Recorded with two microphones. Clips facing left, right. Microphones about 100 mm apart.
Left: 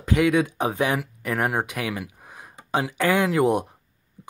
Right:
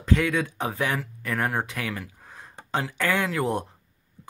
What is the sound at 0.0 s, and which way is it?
Speech, 15° left (ahead or behind).